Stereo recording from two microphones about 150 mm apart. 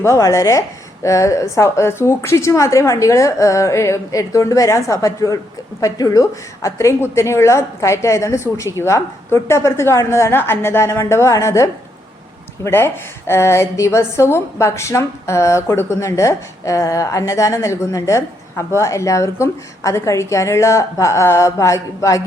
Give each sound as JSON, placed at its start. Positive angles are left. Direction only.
{"t": 0.0, "sound": "a woman's voice", "side_deg": 20}